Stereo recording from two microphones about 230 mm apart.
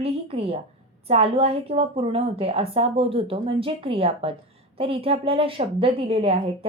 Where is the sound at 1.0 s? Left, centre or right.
Right.